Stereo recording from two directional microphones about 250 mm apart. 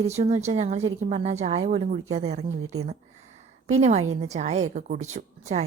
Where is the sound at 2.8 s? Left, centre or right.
Right.